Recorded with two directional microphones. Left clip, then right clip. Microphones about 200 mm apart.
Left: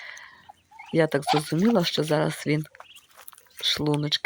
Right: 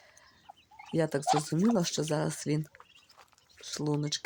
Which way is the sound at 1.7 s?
10° left (ahead or behind).